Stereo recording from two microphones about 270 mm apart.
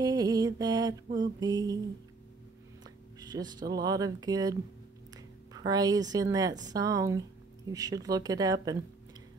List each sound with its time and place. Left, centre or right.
0.0 s mantra: centre
1.0 s speech: centre
3.2 s speech: centre